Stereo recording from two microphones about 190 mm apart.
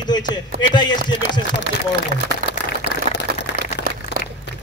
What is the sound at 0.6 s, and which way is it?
Speech, 25° left (ahead or behind).